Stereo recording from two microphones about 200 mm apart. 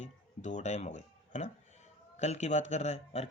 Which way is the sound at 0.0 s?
35° left (ahead or behind).